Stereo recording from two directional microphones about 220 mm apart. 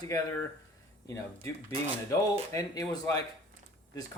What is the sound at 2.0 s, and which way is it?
Speech, 15° left (ahead or behind).